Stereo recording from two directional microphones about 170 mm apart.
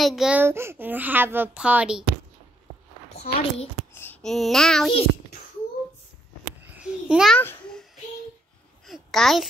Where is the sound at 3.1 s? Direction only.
40° left (ahead or behind).